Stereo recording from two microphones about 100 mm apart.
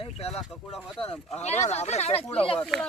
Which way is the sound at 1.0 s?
80° left.